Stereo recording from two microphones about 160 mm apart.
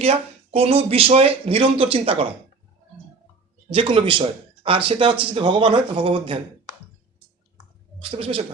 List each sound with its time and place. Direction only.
0.0 s speech: 40° right (ahead or behind)
3.7 s speech: 35° right (ahead or behind)
7.9 s speech: 35° right (ahead or behind)